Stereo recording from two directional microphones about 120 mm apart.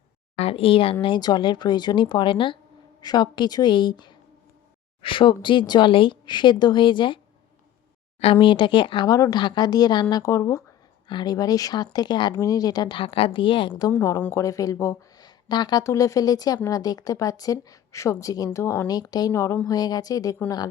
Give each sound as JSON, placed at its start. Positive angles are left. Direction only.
{"t": 0.3, "sound": "speech", "side_deg": 55}
{"t": 1.0, "sound": "a woman's voice", "side_deg": 40}
{"t": 8.2, "sound": "speech", "side_deg": 50}
{"t": 9.0, "sound": "a woman's voice", "side_deg": 30}
{"t": 11.1, "sound": "a woman's voice", "side_deg": 35}
{"t": 14.2, "sound": "a woman's voice", "side_deg": 20}
{"t": 15.2, "sound": "a woman's voice", "side_deg": 35}